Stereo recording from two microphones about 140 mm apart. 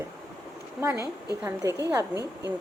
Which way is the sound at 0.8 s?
20° right (ahead or behind).